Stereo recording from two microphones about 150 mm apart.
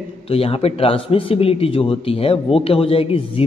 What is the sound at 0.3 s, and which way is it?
A man's voice, 40° left (ahead or behind).